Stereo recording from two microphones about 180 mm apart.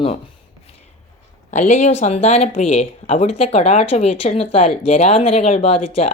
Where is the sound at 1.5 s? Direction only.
40° left (ahead or behind).